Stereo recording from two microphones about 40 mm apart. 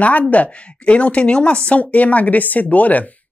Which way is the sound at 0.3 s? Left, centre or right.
Left.